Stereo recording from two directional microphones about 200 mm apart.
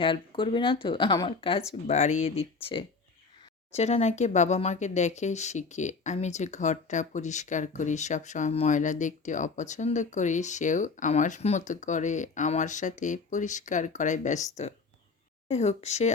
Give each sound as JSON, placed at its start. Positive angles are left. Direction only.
{"t": 0.0, "sound": "speech", "side_deg": 25}